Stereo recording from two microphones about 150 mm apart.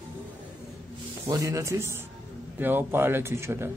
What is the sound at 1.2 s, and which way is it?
Speech, 20° right (ahead or behind).